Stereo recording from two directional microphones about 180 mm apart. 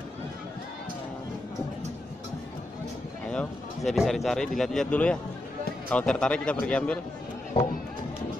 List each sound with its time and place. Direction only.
3.3 s speech: 5° left (ahead or behind)